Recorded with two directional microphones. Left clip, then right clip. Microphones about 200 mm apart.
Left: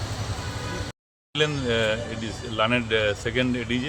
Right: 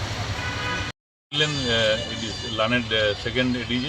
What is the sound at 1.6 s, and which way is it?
Speech, 20° left (ahead or behind).